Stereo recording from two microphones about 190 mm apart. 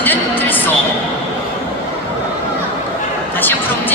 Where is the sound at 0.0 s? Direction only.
10° left (ahead or behind).